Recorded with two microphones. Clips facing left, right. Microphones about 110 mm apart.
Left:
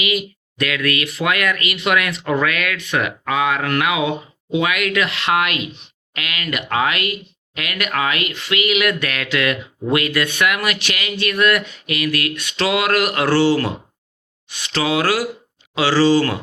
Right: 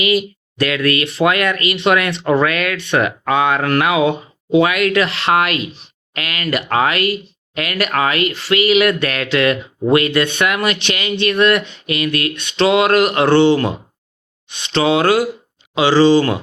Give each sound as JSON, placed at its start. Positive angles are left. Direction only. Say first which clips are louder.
{"t": 0.0, "sound": "speech", "louder": "right 6 dB", "side_deg": -35}